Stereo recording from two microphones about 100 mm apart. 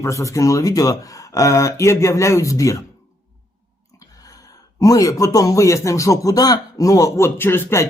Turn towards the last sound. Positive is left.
turn(degrees=25)  # may be behind; listen again after turning